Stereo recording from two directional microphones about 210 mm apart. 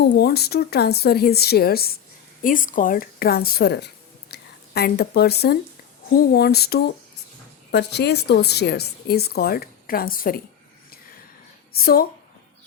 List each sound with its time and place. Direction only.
0.0 s a woman's voice: 50° left (ahead or behind)
11.8 s a woman's voice: 45° left (ahead or behind)